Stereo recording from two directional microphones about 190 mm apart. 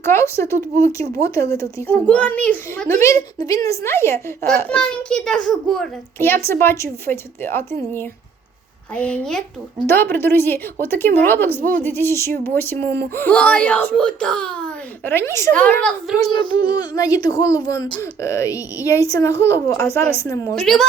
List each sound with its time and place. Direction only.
0.0 s a child's voice: 15° left (ahead or behind)
9.0 s a child's voice: 5° left (ahead or behind)
16.3 s a child's voice: 25° left (ahead or behind)